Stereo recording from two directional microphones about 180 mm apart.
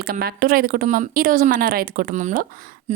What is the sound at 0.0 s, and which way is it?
A woman's voice, 60° right (ahead or behind).